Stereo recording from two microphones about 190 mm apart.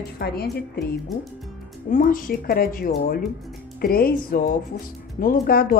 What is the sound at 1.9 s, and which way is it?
Speech, 45° left (ahead or behind).